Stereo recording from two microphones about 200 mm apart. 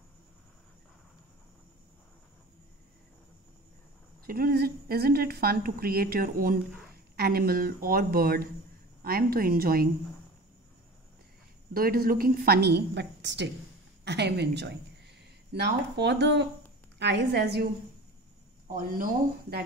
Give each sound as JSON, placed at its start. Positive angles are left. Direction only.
{"t": 4.3, "sound": "a woman's voice", "side_deg": -50}
{"t": 11.7, "sound": "a woman's voice", "side_deg": -50}
{"t": 18.7, "sound": "a woman's voice", "side_deg": -45}